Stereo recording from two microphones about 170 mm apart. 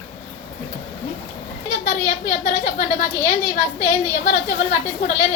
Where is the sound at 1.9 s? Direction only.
45° left (ahead or behind).